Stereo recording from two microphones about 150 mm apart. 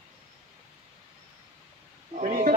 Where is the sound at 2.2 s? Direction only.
60° right (ahead or behind).